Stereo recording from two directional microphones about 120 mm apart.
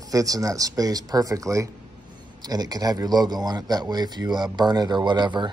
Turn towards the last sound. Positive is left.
turn(degrees=-40)  # may be behind; listen again after turning